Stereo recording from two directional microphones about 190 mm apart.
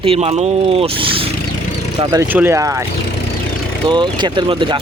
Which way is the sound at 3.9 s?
25° right (ahead or behind).